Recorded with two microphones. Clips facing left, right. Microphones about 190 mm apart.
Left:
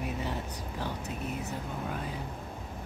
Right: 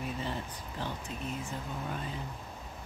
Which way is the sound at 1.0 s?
70° left (ahead or behind).